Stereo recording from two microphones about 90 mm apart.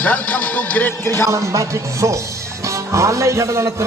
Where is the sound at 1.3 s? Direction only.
35° right (ahead or behind).